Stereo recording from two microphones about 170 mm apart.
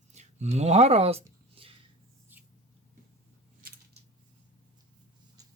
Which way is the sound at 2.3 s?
10° right (ahead or behind).